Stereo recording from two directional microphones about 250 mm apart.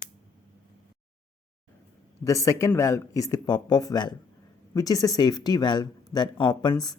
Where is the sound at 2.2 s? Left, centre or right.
Centre.